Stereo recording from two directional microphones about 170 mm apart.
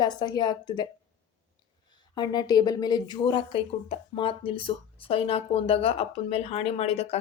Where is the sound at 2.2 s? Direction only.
25° left (ahead or behind).